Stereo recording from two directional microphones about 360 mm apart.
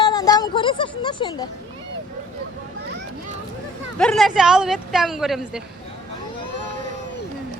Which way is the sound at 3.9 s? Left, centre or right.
Centre.